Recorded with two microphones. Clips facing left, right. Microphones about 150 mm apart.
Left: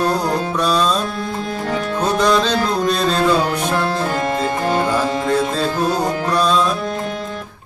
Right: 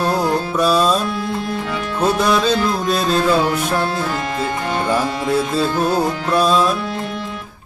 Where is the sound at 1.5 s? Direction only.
40° left (ahead or behind).